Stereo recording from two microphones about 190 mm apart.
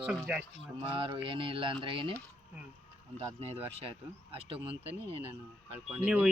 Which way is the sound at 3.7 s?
30° right (ahead or behind).